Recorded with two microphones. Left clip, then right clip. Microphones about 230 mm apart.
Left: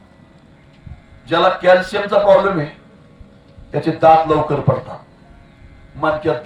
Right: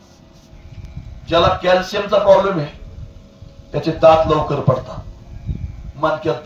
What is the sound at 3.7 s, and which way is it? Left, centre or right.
Speech, centre.